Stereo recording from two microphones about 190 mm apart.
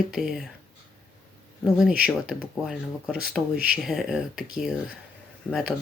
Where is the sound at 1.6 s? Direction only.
5° right (ahead or behind).